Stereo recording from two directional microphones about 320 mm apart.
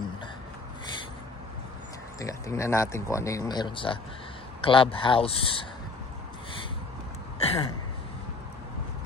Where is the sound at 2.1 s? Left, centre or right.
Centre.